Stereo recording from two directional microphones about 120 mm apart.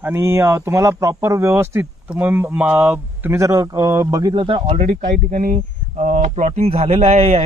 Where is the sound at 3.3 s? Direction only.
25° right (ahead or behind); by 4.7 s 45° right (ahead or behind).